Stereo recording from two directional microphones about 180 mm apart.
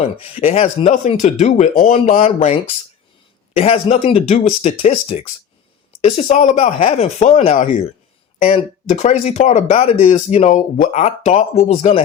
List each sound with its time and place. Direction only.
0.2 s speech: 30° left (ahead or behind)